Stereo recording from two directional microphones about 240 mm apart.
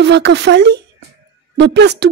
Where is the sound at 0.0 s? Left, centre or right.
Right.